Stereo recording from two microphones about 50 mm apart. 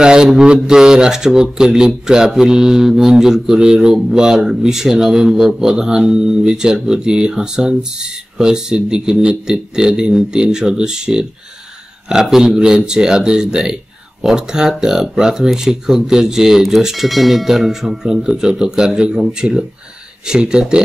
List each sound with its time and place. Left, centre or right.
0.0 s speech: centre